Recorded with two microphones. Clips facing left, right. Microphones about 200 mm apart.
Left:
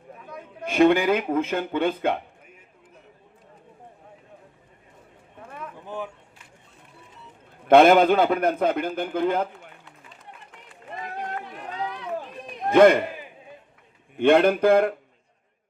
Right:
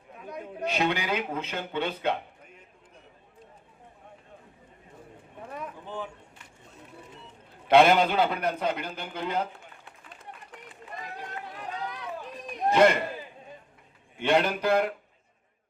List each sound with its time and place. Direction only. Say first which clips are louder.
0.6 s speech: left 10 dB; 50° left (ahead or behind)
5.8 s speech: left 6 dB; 10° left (ahead or behind)
7.7 s speech: left 5 dB; 50° left (ahead or behind)
12.7 s speech: left 6 dB; 55° left (ahead or behind)
14.2 s speech: left 8 dB; 55° left (ahead or behind)